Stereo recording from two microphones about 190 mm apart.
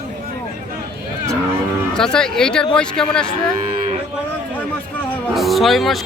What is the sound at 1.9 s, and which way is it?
Speech, 5° left (ahead or behind).